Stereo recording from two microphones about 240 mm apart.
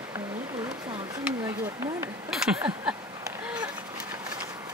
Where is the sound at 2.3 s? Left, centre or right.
Centre.